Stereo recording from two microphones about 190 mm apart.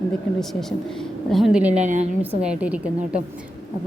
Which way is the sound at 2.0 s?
5° right (ahead or behind).